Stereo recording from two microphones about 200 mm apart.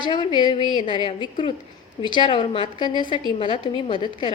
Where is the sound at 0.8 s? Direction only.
25° left (ahead or behind).